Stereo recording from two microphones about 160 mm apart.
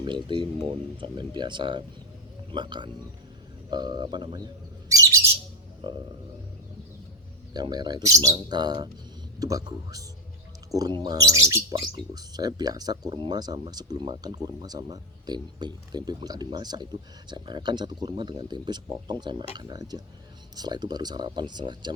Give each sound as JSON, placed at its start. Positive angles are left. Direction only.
{"t": 0.0, "sound": "speech", "side_deg": -30}
{"t": 4.9, "sound": "bird", "side_deg": -20}
{"t": 7.5, "sound": "speech", "side_deg": -25}